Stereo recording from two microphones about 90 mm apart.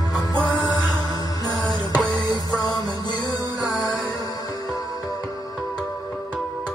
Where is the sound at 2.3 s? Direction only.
45° left (ahead or behind).